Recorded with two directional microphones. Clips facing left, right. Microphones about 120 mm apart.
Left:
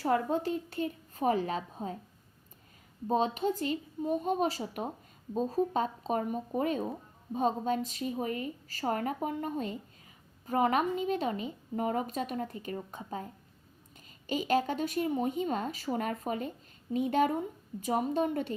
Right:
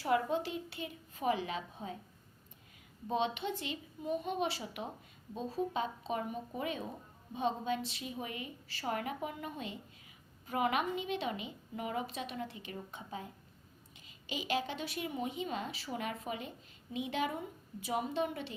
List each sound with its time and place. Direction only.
0.0 s a woman's voice: 40° left (ahead or behind)
3.1 s a woman's voice: 40° left (ahead or behind)